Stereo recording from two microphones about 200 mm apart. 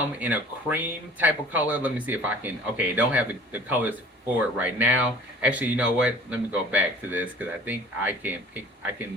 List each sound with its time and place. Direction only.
0.2 s speech: 10° right (ahead or behind)